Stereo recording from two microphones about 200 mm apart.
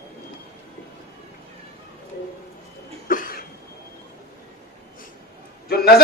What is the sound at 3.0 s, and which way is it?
Cough, 45° left (ahead or behind).